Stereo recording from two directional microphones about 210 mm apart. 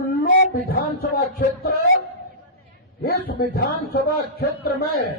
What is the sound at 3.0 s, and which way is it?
A man's voice, 45° left (ahead or behind).